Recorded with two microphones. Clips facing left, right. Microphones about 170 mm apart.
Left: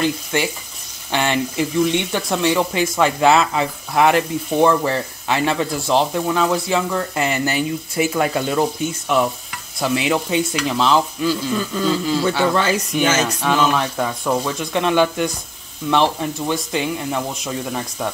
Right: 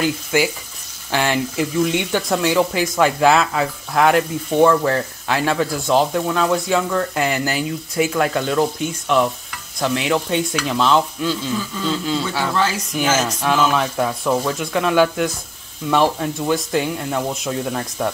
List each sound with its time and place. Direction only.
0.0 s speech: 5° right (ahead or behind)
12.5 s speech: 65° left (ahead or behind)
13.1 s speech: centre (ahead or behind)